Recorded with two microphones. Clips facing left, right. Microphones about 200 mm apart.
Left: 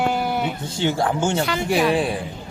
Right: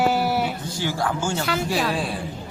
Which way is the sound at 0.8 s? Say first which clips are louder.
Left 5 dB; 25° left (ahead or behind).